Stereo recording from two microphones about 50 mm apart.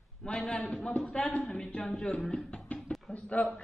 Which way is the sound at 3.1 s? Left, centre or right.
Left.